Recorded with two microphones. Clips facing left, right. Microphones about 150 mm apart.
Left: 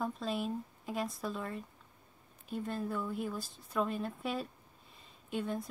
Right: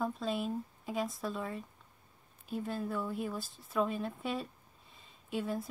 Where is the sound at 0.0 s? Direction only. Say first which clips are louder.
Right 1 dB; centre (ahead or behind).